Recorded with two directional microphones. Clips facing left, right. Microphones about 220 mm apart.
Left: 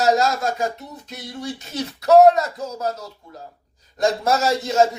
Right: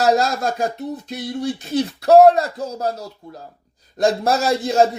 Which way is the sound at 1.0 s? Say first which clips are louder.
Right 5 dB; 35° right (ahead or behind).